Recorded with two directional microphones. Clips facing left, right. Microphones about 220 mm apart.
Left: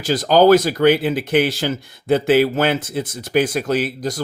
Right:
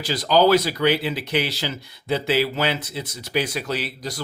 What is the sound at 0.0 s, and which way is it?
Speech, 50° left (ahead or behind).